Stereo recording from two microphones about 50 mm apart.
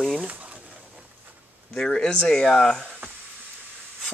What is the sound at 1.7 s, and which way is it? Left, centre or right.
Speech, centre.